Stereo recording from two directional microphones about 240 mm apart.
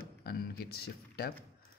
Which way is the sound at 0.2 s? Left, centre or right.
Left.